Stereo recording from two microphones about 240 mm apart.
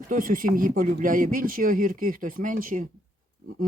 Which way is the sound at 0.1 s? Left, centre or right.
Right.